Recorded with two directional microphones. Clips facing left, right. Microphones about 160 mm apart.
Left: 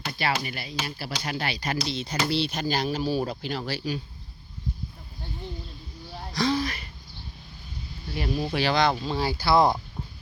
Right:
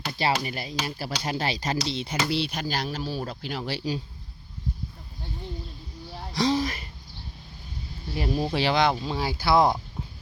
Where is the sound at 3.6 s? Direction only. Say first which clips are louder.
Right 4 dB; 25° right (ahead or behind).